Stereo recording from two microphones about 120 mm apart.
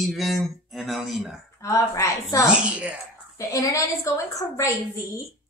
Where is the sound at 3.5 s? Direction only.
30° left (ahead or behind).